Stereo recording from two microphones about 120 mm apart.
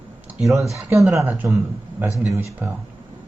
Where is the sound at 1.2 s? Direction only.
15° right (ahead or behind).